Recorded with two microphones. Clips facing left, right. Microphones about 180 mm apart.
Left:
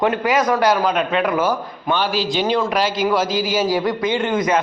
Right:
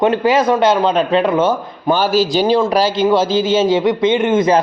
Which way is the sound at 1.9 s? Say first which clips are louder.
Right 6 dB; 40° right (ahead or behind).